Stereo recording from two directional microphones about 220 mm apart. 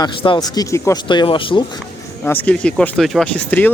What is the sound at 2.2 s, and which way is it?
Speech, 10° left (ahead or behind).